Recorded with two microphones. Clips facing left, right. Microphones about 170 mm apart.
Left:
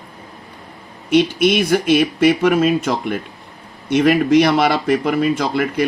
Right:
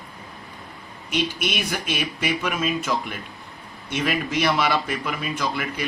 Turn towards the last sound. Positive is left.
turn(degrees=50)  # may be behind; listen again after turning